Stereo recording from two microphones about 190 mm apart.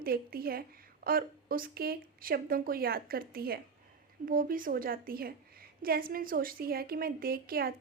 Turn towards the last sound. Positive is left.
turn(degrees=-50)  # may be behind; listen again after turning